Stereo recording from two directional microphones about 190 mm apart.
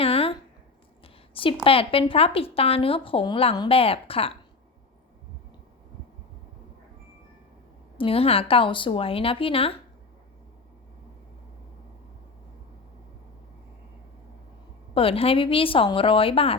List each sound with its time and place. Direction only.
0.0 s a sound: 30° left (ahead or behind)
1.6 s speech: 30° left (ahead or behind)
7.9 s speech: 30° left (ahead or behind)
14.9 s speech: 30° left (ahead or behind)